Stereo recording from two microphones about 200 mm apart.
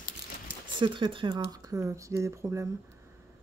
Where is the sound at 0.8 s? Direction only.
25° right (ahead or behind).